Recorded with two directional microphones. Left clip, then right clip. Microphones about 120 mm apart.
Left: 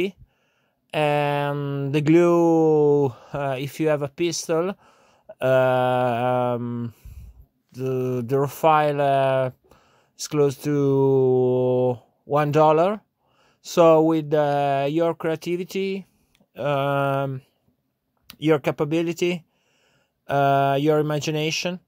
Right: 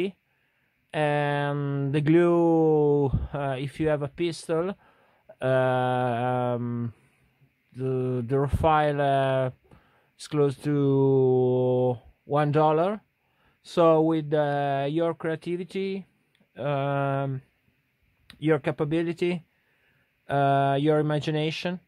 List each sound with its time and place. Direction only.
0.8 s speech: 15° left (ahead or behind)
1.5 s speech: centre (ahead or behind)
1.9 s speech: 10° left (ahead or behind)
6.6 s speech: centre (ahead or behind)
7.7 s speech: 10° left (ahead or behind)
16.5 s mantra: 20° left (ahead or behind)
18.2 s speech: 15° left (ahead or behind)